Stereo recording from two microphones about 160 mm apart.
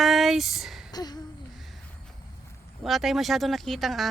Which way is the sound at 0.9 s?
25° left (ahead or behind).